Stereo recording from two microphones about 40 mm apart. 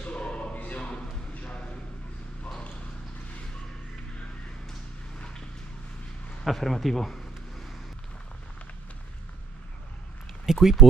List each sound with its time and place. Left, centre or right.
0.0 s a sound: left
6.4 s speech: centre
10.4 s speech: centre